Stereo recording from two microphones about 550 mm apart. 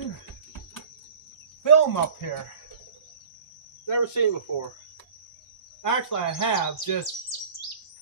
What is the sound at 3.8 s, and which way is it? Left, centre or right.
Speech, left.